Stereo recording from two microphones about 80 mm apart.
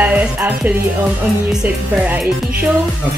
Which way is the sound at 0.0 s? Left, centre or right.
Centre.